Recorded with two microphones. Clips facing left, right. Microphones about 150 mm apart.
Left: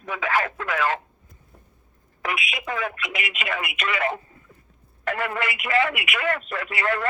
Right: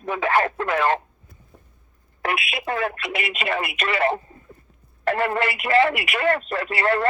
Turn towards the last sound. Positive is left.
turn(degrees=-30)  # may be behind; listen again after turning